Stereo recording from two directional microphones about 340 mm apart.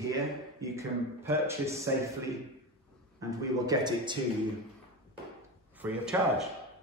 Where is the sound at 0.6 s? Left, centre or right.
Centre.